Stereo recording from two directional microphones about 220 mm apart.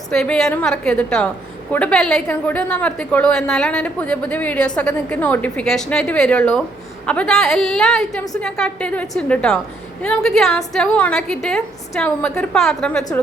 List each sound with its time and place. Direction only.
0.1 s a woman's voice: 5° left (ahead or behind)